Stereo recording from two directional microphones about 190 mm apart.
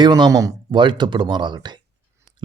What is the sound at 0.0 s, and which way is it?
Speech, 20° right (ahead or behind).